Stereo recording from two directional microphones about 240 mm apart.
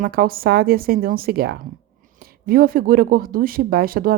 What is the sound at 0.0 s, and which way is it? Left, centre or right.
Speech, right.